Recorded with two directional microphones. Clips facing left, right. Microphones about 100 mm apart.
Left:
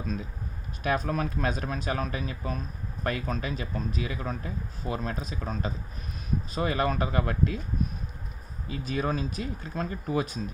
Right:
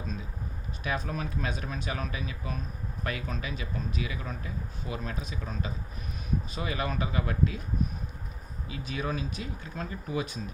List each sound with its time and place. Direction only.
0.9 s speech: 50° left (ahead or behind)
8.7 s speech: 40° left (ahead or behind)